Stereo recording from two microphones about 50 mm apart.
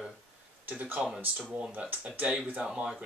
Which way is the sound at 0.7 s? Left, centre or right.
Right.